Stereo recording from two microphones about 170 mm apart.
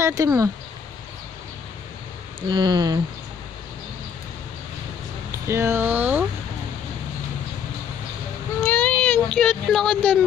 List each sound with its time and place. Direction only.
0.0 s speech: 20° right (ahead or behind)
2.5 s speech: 25° right (ahead or behind)
5.5 s speech: 15° right (ahead or behind)
8.5 s a sound: 10° left (ahead or behind)